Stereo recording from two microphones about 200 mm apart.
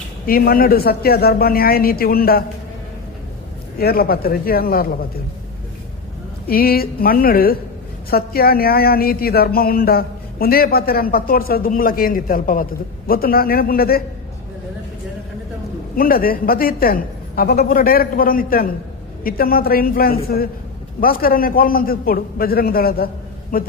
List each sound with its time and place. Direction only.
0.3 s speech: 45° left (ahead or behind)
3.8 s speech: 50° left (ahead or behind)
6.5 s speech: 50° left (ahead or behind)
16.0 s speech: 45° left (ahead or behind)